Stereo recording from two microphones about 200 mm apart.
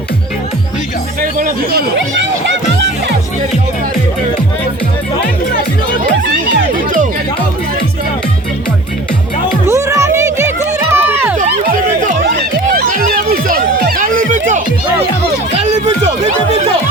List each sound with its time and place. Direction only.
1.2 s a sound: 45° right (ahead or behind)
2.5 s music: 65° right (ahead or behind)
9.6 s music: 15° right (ahead or behind)
10.8 s run: 10° right (ahead or behind)
12.0 s music: 55° right (ahead or behind); by 15.9 s 35° right (ahead or behind)